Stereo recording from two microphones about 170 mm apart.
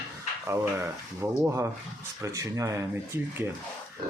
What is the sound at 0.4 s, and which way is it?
Speech, 15° right (ahead or behind).